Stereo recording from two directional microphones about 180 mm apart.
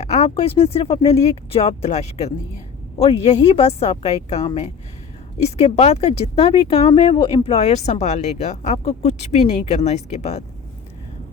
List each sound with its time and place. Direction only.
0.0 s speech: 40° left (ahead or behind)